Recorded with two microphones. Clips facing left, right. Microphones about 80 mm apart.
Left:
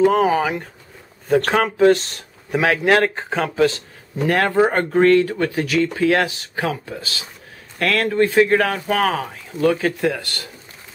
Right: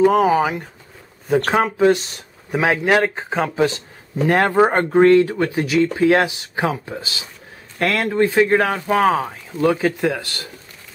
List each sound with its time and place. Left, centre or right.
0.0 s speech: centre
5.5 s speech: centre
5.8 s speech: right